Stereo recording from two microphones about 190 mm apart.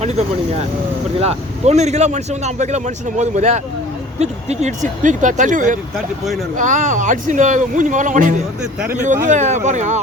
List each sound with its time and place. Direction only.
0.0 s speech: 35° right (ahead or behind)